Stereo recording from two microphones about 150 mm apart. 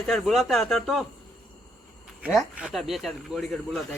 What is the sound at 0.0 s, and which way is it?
Speech, centre (ahead or behind).